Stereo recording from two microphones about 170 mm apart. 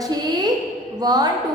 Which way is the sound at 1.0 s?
25° right (ahead or behind).